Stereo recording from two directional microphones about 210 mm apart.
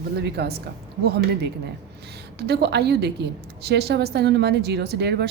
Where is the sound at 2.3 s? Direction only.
50° right (ahead or behind).